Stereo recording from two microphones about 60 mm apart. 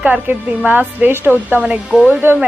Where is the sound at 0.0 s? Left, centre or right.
Right.